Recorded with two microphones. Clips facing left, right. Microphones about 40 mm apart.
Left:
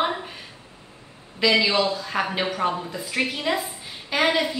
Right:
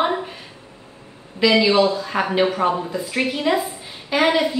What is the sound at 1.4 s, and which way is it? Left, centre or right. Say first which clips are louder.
Speech: right 5 dB; centre.